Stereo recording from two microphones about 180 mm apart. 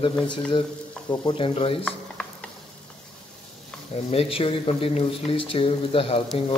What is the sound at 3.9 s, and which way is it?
Speech, 35° left (ahead or behind).